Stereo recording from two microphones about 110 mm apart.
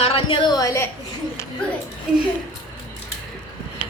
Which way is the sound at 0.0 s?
55° left (ahead or behind).